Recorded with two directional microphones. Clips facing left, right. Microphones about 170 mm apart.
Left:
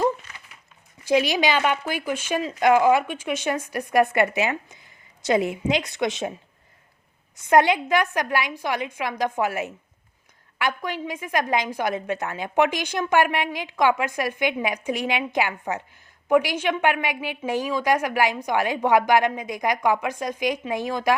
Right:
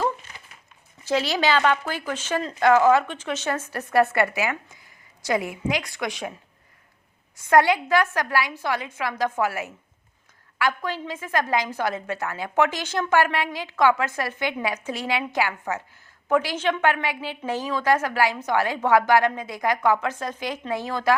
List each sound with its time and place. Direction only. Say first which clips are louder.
1.0 s speech: left 2 dB; 15° left (ahead or behind)
7.4 s a woman's voice: even; 20° left (ahead or behind)